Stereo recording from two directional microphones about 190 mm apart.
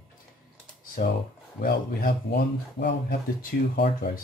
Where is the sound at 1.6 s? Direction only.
50° left (ahead or behind).